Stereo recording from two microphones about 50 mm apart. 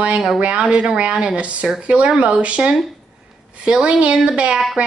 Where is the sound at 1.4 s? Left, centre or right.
Right.